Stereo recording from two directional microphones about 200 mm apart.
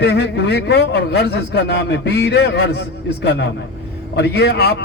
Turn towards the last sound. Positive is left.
turn(degrees=55)  # may be behind; listen again after turning